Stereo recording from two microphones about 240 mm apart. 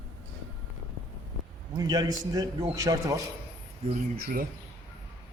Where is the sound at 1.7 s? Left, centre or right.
Centre.